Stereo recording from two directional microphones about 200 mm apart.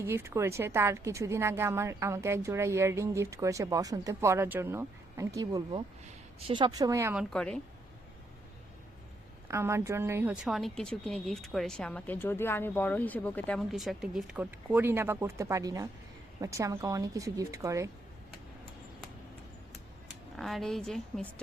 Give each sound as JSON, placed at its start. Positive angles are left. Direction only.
{"t": 0.0, "sound": "speech", "side_deg": -15}
{"t": 7.3, "sound": "a woman's voice", "side_deg": 5}
{"t": 9.5, "sound": "a woman's voice", "side_deg": -15}
{"t": 20.3, "sound": "a woman's voice", "side_deg": 0}